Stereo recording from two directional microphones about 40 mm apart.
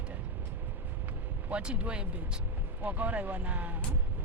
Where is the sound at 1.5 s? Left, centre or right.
Right.